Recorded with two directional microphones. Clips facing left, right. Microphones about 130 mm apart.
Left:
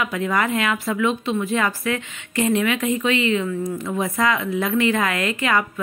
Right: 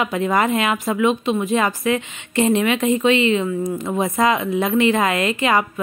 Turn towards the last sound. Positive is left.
turn(degrees=-20)  # may be behind; listen again after turning